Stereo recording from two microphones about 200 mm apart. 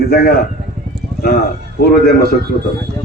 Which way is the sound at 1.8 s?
55° left (ahead or behind).